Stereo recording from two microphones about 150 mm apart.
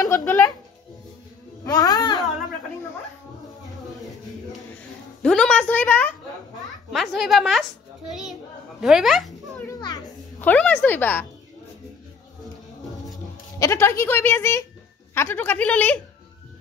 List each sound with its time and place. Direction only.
0.2 s a woman's voice: 15° left (ahead or behind)
1.6 s speech: 25° left (ahead or behind)
5.2 s a woman's voice: 5° left (ahead or behind)
6.9 s a child's voice: centre (ahead or behind)
13.6 s a woman's voice: 20° left (ahead or behind)